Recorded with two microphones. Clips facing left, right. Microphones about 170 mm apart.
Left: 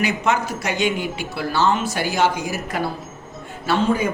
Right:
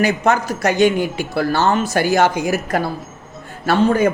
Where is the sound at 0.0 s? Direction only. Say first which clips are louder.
Right 4 dB; 40° right (ahead or behind).